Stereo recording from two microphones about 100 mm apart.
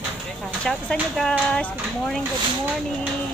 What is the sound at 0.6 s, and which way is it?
Speech, 10° left (ahead or behind).